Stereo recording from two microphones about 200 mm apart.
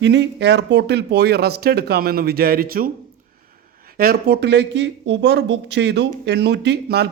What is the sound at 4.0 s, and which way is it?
Speech, 50° right (ahead or behind).